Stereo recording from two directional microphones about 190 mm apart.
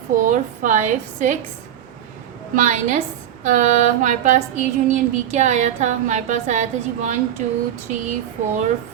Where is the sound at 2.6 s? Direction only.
40° right (ahead or behind).